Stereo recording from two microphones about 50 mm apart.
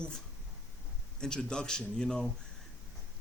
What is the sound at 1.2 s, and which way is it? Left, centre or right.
A man's voice, centre.